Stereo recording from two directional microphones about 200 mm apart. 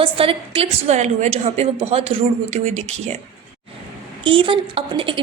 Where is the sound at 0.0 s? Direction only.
25° right (ahead or behind).